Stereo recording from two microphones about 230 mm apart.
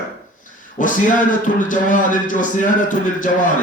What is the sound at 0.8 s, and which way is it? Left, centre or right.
A man's voice, left.